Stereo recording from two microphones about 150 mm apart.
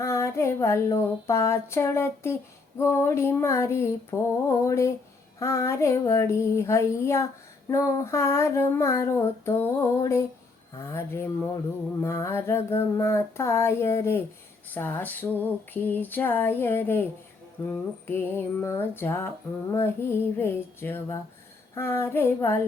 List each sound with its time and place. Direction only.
0.0 s female singing: 20° left (ahead or behind)